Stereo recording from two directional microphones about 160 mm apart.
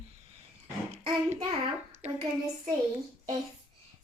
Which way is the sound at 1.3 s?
45° right (ahead or behind).